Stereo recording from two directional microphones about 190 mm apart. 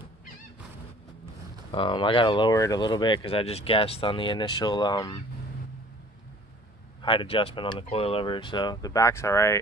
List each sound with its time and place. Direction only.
1.7 s speech: 25° left (ahead or behind)
7.0 s speech: 25° left (ahead or behind)